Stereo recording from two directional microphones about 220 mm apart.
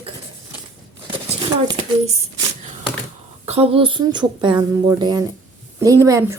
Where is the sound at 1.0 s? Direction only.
20° right (ahead or behind).